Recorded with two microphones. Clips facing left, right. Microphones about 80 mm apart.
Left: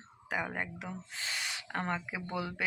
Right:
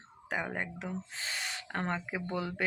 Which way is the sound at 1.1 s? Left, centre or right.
Right.